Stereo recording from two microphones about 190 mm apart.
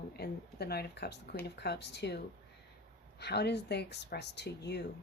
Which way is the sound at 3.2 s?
60° left (ahead or behind).